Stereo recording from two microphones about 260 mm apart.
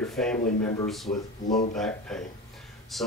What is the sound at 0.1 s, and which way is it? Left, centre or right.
Speech, centre.